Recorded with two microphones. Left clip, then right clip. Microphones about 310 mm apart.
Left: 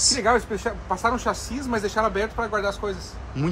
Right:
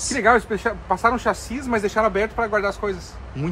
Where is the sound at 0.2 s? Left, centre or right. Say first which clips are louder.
Right 4 dB; right.